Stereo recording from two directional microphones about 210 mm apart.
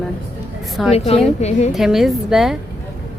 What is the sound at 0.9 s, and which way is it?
Speech, 30° left (ahead or behind).